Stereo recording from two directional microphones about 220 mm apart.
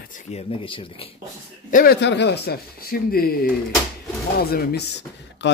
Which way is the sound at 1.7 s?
45° left (ahead or behind).